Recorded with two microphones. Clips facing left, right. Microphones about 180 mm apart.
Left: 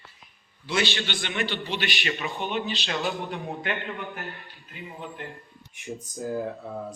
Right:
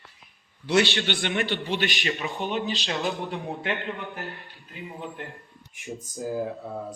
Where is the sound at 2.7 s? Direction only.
35° right (ahead or behind).